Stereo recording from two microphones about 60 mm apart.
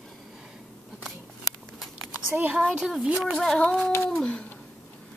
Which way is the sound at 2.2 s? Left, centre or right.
Right.